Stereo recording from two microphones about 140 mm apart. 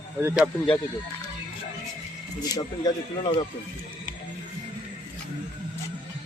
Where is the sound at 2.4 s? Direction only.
25° left (ahead or behind).